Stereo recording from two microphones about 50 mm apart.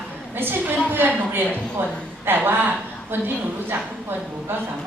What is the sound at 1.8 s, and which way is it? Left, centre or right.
Speech, right.